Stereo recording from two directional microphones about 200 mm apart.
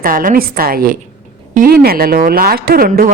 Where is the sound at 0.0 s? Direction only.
45° right (ahead or behind).